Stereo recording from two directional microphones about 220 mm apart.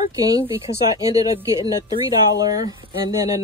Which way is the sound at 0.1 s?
15° right (ahead or behind).